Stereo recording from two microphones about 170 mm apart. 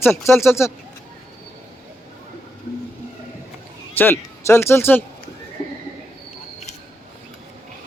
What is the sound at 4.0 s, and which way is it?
A man's voice, 15° left (ahead or behind).